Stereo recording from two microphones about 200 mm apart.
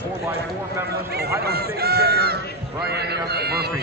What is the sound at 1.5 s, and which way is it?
Run, 50° right (ahead or behind).